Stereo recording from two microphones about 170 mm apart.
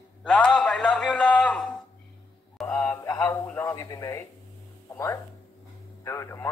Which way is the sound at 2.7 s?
15° left (ahead or behind).